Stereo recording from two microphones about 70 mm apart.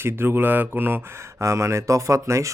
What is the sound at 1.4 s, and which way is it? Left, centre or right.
Speech, right.